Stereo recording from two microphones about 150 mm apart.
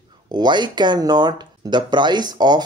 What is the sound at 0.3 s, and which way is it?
Speech, 30° right (ahead or behind).